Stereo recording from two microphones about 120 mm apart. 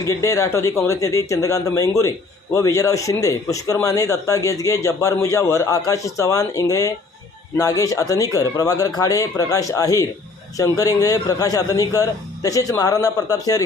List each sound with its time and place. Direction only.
0.0 s a man's voice: 25° left (ahead or behind)